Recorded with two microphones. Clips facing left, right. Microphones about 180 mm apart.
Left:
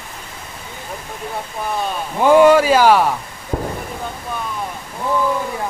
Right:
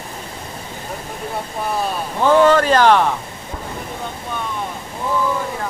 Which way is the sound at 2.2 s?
10° left (ahead or behind).